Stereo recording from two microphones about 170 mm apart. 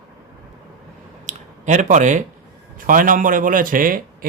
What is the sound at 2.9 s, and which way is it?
Speech, 55° right (ahead or behind).